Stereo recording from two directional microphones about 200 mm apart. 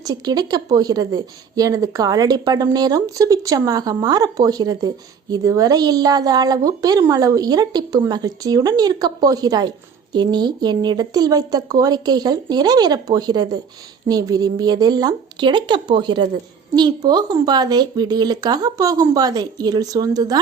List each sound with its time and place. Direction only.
0.0 s a woman's voice: 20° right (ahead or behind)